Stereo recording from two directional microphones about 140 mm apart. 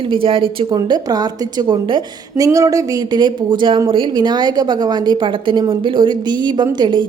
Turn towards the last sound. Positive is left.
turn(degrees=-35)  # may be behind; listen again after turning